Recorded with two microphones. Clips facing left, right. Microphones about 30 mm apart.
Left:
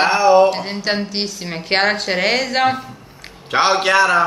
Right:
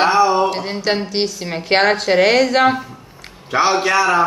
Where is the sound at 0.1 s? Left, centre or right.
Left.